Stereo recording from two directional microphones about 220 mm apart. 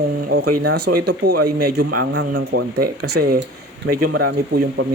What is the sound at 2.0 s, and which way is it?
Speech, 55° right (ahead or behind).